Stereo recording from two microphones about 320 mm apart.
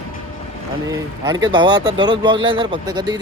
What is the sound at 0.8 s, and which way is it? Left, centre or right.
Speech, centre.